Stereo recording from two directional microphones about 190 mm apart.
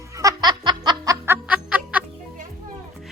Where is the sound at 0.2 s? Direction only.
20° right (ahead or behind).